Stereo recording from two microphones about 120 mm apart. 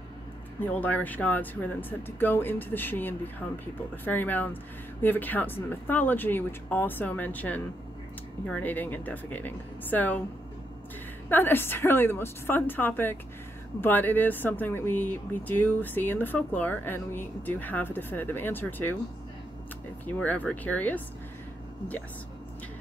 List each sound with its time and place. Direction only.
0.6 s speech: 15° left (ahead or behind)
11.2 s speech: 15° left (ahead or behind)
20.2 s speech: 10° left (ahead or behind)